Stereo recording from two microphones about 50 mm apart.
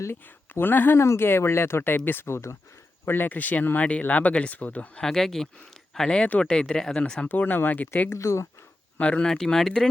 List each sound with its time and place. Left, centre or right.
0.1 s speech: left
0.9 s speech: left
1.2 s speech: left
2.2 s speech: left
3.1 s speech: left
5.0 s speech: centre
7.3 s speech: left
8.1 s speech: left
9.0 s speech: left
9.2 s speech: centre